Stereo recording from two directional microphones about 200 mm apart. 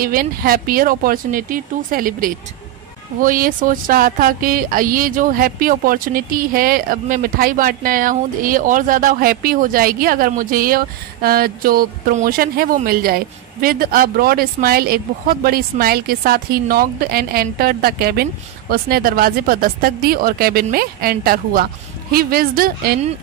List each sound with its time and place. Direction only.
0.0 s speech: 45° right (ahead or behind)